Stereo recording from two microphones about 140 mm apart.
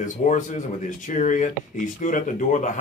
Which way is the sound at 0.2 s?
55° left (ahead or behind).